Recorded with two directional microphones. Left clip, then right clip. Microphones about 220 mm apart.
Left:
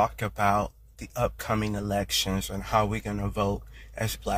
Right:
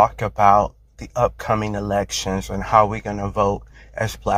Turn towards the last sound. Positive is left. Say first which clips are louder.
# right 8 dB
turn(degrees=10)  # may be behind; listen again after turning